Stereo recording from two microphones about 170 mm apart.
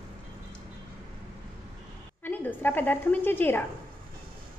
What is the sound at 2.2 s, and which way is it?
Speech, 10° left (ahead or behind).